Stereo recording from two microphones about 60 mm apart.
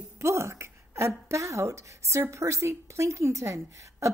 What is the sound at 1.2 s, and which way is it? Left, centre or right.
A woman's voice, right.